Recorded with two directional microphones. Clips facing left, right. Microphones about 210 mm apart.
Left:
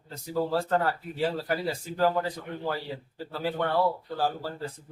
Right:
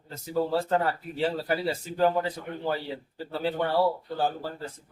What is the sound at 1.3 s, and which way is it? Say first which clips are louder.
Speech: right 1 dB; 25° right (ahead or behind).